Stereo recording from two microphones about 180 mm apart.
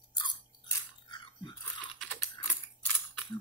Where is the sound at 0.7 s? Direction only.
25° left (ahead or behind).